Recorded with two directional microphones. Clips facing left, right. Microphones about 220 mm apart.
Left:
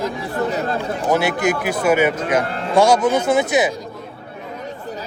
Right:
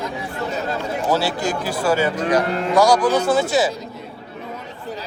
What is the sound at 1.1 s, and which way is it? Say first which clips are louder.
Speech: left 4 dB; 20° left (ahead or behind).